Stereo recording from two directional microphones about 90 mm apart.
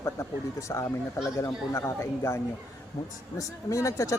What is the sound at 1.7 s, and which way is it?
A man's voice, 30° left (ahead or behind).